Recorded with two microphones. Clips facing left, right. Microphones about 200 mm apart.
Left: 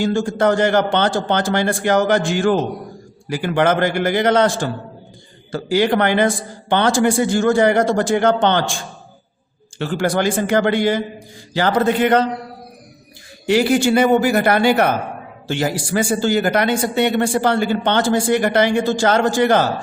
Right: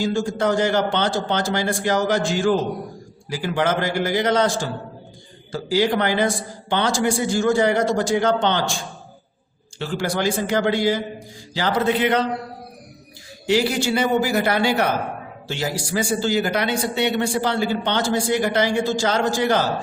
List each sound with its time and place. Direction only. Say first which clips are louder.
0.0 s a man's voice: left 4 dB; 55° left (ahead or behind)
9.7 s a man's voice: left 5 dB; 55° left (ahead or behind)
13.5 s speech: left 5 dB; 55° left (ahead or behind)